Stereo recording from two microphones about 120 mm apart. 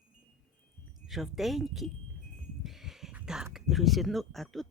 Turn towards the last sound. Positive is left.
turn(degrees=0)  # may be behind; listen again after turning